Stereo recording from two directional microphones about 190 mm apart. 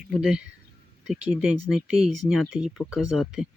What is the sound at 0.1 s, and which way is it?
Speech, 5° right (ahead or behind).